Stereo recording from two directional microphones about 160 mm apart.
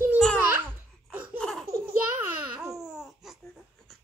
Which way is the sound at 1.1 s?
10° right (ahead or behind).